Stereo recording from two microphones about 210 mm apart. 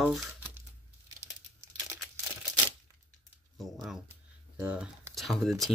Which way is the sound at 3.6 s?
Centre (ahead or behind).